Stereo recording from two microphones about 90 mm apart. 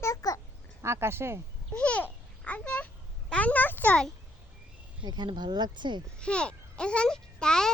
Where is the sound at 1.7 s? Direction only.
15° left (ahead or behind).